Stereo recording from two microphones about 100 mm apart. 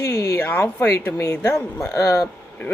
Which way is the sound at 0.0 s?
30° left (ahead or behind).